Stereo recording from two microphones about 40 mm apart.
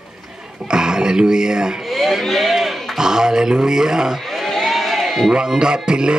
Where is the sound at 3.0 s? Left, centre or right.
Centre.